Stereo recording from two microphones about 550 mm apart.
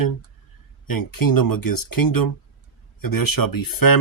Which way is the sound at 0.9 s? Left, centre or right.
Left.